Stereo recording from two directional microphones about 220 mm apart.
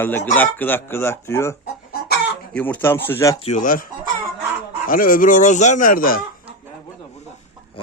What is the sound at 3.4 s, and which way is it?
Speech, 35° left (ahead or behind).